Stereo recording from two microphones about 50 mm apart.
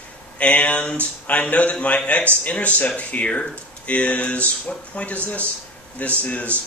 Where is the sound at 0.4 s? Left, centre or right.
Left.